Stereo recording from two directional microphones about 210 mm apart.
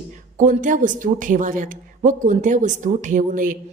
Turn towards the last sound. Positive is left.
turn(degrees=-40)  # may be behind; listen again after turning